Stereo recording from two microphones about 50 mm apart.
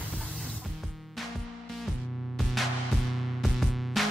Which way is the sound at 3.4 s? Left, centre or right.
Centre.